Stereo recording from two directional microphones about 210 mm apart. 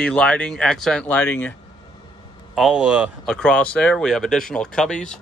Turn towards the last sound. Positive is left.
turn(degrees=5)  # may be behind; listen again after turning